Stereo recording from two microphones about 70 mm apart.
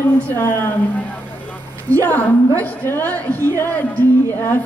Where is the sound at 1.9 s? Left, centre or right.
Left.